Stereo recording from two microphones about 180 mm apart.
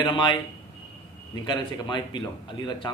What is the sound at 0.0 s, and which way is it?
Speech, 25° left (ahead or behind).